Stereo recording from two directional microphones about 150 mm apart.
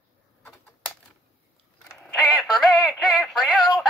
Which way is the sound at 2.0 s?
Centre (ahead or behind).